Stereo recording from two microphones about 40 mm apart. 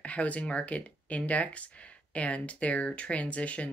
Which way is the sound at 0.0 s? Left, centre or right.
Left.